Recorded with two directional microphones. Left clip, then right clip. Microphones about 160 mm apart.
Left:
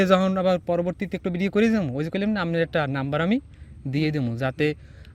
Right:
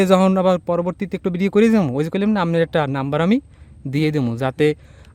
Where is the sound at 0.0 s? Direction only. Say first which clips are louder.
Right 5 dB; 40° right (ahead or behind).